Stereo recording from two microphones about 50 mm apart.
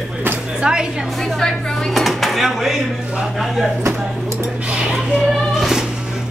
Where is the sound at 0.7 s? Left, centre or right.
Centre.